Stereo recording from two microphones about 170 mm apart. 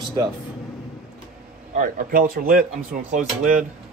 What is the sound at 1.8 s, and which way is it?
Speech, 55° right (ahead or behind).